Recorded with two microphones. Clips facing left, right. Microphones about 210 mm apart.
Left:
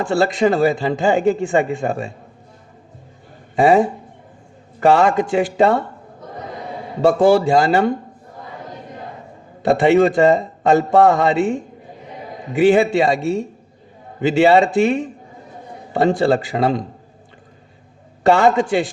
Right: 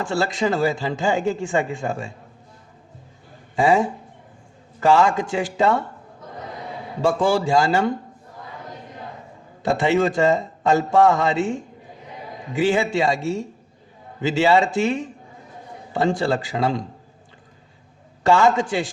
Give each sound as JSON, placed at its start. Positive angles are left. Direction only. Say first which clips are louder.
{"t": 0.0, "sound": "a man's voice", "louder": "left 6 dB", "side_deg": 60}
{"t": 3.5, "sound": "a man's voice", "louder": "left 5 dB", "side_deg": 60}
{"t": 7.0, "sound": "a man's voice", "louder": "left 6 dB", "side_deg": 60}
{"t": 9.6, "sound": "a man's voice", "louder": "left 6 dB", "side_deg": 60}
{"t": 18.2, "sound": "a man's voice", "louder": "left 3 dB", "side_deg": 60}